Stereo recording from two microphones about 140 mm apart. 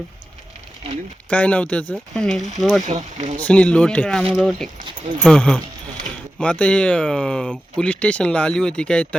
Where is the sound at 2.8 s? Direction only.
55° right (ahead or behind).